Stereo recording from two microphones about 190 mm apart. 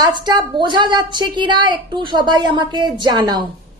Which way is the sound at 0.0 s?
25° right (ahead or behind).